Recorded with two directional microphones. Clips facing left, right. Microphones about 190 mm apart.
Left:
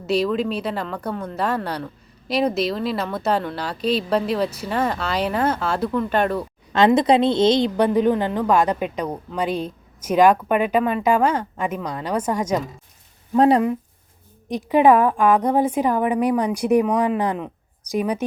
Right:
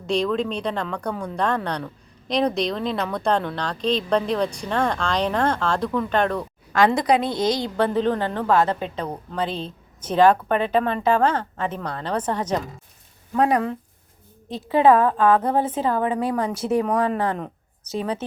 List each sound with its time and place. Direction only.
0.1 s speech: 5° left (ahead or behind)
6.7 s a woman's voice: 25° left (ahead or behind)
13.3 s speech: 30° left (ahead or behind)
14.5 s a woman's voice: 15° left (ahead or behind)